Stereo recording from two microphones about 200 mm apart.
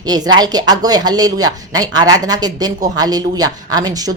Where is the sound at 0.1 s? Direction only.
20° right (ahead or behind).